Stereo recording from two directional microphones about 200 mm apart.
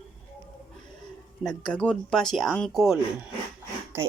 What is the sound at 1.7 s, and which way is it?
Speech, 5° left (ahead or behind).